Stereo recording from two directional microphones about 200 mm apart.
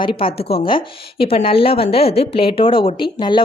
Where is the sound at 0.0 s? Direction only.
25° left (ahead or behind).